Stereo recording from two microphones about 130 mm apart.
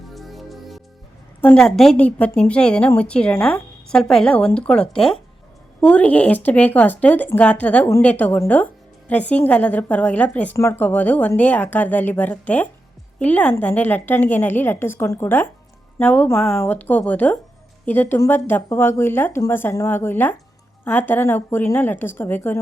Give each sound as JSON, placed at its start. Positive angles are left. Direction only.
{"t": 0.1, "sound": "music", "side_deg": 0}
{"t": 1.4, "sound": "a woman's voice", "side_deg": 10}